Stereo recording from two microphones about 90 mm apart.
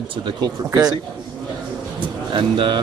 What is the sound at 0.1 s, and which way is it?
Speech, 70° right (ahead or behind).